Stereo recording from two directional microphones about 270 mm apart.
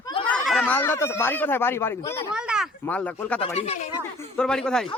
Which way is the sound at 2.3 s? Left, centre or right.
Centre.